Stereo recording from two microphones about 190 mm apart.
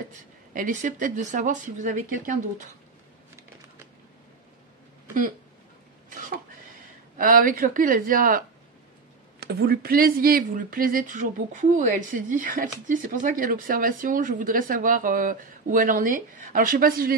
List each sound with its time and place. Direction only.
0.5 s speech: 45° right (ahead or behind)
6.0 s throat clearing: 45° right (ahead or behind)
7.2 s speech: 45° right (ahead or behind)
9.4 s speech: 60° right (ahead or behind)